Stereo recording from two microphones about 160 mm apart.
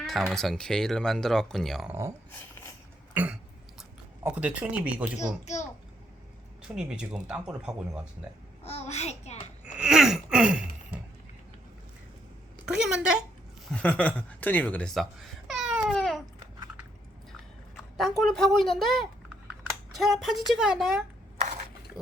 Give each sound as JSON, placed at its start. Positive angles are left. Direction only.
{"t": 0.0, "sound": "speech", "side_deg": 0}
{"t": 1.9, "sound": "speech", "side_deg": -15}
{"t": 3.2, "sound": "speech", "side_deg": -10}
{"t": 6.6, "sound": "speech", "side_deg": -5}
{"t": 8.6, "sound": "babbling", "side_deg": 40}
{"t": 9.7, "sound": "a sound", "side_deg": -5}
{"t": 12.6, "sound": "a sound", "side_deg": -5}
{"t": 13.7, "sound": "speech", "side_deg": 10}
{"t": 17.7, "sound": "speech", "side_deg": 0}